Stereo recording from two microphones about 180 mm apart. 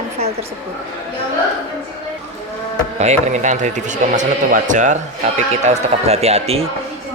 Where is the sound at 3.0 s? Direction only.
40° right (ahead or behind).